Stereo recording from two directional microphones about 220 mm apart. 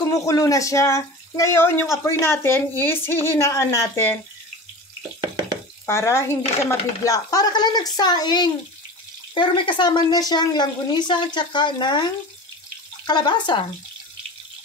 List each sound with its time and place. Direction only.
0.1 s speech: 15° left (ahead or behind)
5.9 s a woman's voice: 10° left (ahead or behind)